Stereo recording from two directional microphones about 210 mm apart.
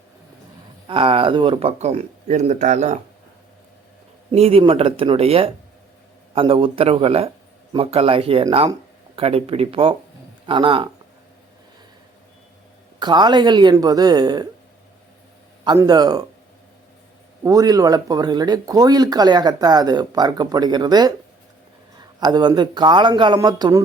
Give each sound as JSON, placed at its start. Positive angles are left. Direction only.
{"t": 0.9, "sound": "speech", "side_deg": -25}
{"t": 4.3, "sound": "speech", "side_deg": -25}
{"t": 13.0, "sound": "speech", "side_deg": -20}
{"t": 15.6, "sound": "speech", "side_deg": -20}
{"t": 17.4, "sound": "speech", "side_deg": -15}